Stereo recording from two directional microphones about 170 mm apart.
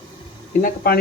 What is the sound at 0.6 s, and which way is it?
Speech, 65° left (ahead or behind).